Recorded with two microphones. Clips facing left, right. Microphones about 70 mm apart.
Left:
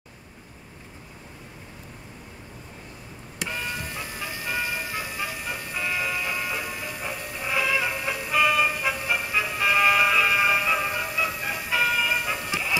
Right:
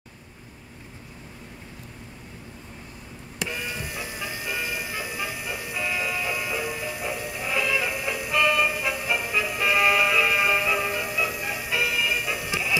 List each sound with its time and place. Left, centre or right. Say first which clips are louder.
3.8 s music: right 1 dB; centre
12.1 s music: left 1 dB; left